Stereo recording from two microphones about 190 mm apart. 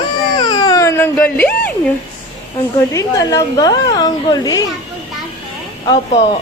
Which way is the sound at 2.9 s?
15° left (ahead or behind).